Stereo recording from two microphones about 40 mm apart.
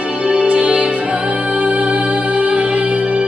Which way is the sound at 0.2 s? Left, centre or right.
Right.